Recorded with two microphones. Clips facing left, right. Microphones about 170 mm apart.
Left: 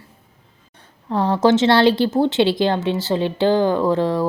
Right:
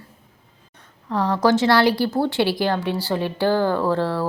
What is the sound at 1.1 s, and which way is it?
Speech, 30° left (ahead or behind).